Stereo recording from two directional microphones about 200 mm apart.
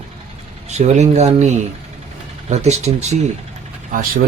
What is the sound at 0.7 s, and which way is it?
Speech, 35° right (ahead or behind).